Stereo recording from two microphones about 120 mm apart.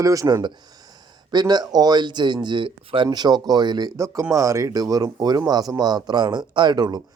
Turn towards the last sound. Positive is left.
turn(degrees=-35)  # may be behind; listen again after turning